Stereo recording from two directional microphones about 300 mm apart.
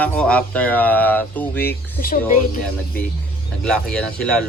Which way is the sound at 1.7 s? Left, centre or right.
Left.